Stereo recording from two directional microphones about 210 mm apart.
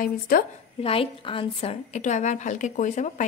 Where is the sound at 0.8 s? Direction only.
25° left (ahead or behind).